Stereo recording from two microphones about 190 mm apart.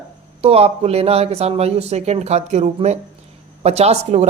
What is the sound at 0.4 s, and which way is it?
Speech, 30° right (ahead or behind).